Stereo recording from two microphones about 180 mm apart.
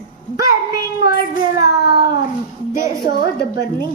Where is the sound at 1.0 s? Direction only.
65° left (ahead or behind).